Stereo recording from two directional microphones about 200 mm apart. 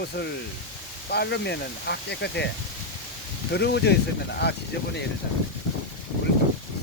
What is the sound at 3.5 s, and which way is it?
Speech, 55° left (ahead or behind).